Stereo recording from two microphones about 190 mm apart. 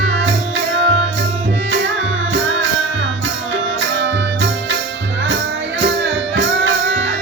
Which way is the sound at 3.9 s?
65° right (ahead or behind).